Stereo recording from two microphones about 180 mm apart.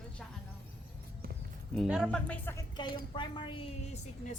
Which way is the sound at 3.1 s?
25° left (ahead or behind).